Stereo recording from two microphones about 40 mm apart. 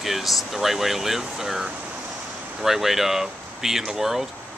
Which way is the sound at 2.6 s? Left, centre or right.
Centre.